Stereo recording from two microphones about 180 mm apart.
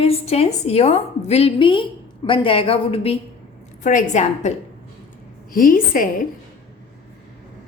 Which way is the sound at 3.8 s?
45° left (ahead or behind).